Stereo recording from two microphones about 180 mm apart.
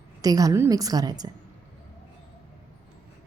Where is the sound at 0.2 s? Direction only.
20° right (ahead or behind).